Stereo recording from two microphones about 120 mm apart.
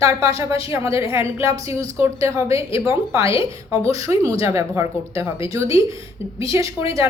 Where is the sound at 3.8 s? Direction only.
25° right (ahead or behind).